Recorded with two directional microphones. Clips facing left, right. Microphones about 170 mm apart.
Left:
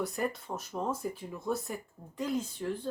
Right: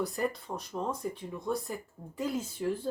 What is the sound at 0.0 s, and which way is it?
Speech, centre (ahead or behind).